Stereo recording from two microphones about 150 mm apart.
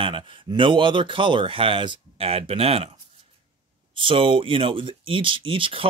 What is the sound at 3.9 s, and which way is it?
Speech, 35° right (ahead or behind).